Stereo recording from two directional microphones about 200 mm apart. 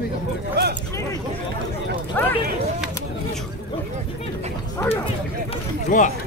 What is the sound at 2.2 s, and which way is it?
Speech, 10° left (ahead or behind).